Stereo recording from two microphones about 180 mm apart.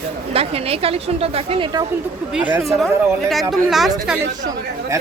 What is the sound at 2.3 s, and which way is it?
Speech, 5° right (ahead or behind).